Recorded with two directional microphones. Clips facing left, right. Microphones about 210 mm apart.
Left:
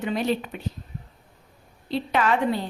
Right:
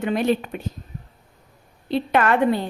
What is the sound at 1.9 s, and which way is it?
Speech, 55° right (ahead or behind).